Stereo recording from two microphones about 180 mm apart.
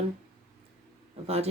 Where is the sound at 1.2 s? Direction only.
35° right (ahead or behind).